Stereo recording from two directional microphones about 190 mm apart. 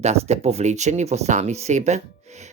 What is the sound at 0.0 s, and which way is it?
Speech, 35° right (ahead or behind).